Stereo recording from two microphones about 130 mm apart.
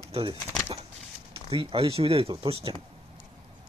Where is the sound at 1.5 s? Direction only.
40° right (ahead or behind).